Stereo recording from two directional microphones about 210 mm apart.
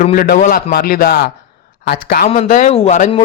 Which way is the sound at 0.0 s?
40° left (ahead or behind).